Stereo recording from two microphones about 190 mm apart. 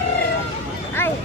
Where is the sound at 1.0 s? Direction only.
10° left (ahead or behind).